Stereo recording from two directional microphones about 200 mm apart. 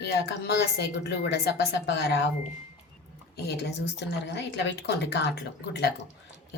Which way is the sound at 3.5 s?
55° left (ahead or behind).